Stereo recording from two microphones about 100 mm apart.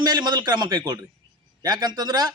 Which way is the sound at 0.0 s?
45° right (ahead or behind).